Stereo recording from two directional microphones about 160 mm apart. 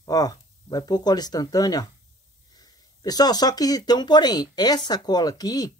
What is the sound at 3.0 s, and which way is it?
Speech, 25° left (ahead or behind).